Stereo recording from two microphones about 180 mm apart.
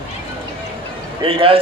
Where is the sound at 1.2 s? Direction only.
30° right (ahead or behind).